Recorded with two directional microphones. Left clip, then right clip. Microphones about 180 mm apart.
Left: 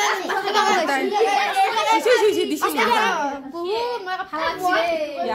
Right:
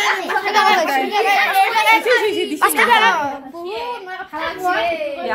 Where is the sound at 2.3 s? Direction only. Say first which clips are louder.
Even; 15° left (ahead or behind).